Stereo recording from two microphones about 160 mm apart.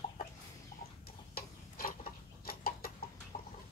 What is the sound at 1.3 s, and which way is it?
Tick-tock, 65° left (ahead or behind).